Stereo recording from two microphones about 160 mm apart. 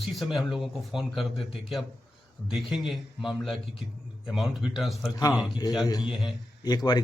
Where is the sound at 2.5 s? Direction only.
Centre (ahead or behind).